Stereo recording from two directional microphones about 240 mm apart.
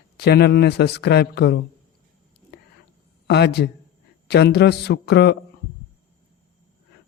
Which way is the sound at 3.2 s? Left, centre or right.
Left.